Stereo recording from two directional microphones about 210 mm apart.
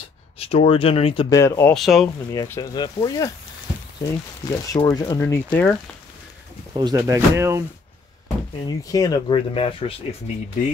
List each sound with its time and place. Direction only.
0.4 s speech: 25° left (ahead or behind)
1.3 s speech: 15° left (ahead or behind)
1.8 s speech: centre (ahead or behind)
2.3 s speech: 15° left (ahead or behind)
4.5 s speech: 20° left (ahead or behind)
6.7 s speech: 20° right (ahead or behind)
8.6 s speech: 20° left (ahead or behind)